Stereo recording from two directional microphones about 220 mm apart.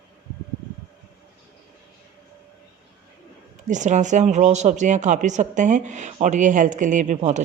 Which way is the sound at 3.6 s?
35° right (ahead or behind).